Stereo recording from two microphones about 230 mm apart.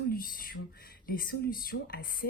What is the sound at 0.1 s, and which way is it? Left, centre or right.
Speech, left.